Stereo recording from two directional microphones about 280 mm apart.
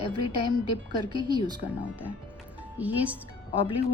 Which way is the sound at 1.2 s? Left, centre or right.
Centre.